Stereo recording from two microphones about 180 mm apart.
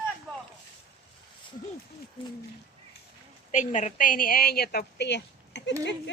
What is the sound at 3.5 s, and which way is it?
A woman's voice, 40° left (ahead or behind).